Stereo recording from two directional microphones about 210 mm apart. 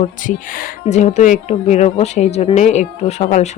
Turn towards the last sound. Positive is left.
turn(degrees=35)  # may be behind; listen again after turning